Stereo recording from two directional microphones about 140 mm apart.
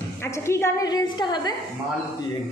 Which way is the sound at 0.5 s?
20° left (ahead or behind).